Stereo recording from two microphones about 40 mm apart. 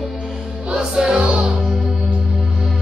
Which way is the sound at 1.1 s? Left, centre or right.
Right.